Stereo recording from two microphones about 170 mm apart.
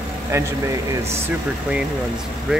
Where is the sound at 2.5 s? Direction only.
5° right (ahead or behind).